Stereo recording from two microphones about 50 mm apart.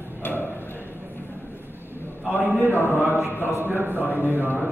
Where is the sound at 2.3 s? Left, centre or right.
Right.